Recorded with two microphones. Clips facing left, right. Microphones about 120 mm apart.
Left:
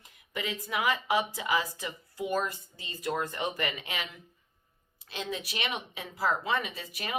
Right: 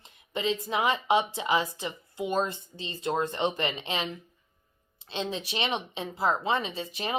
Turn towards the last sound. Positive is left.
turn(degrees=-25)  # may be behind; listen again after turning